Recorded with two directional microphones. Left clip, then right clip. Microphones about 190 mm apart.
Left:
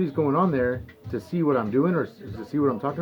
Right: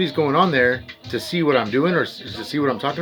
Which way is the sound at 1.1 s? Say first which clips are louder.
Right 6 dB; 10° right (ahead or behind).